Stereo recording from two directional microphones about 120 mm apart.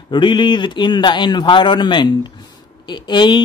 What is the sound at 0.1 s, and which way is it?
Speech, 40° left (ahead or behind).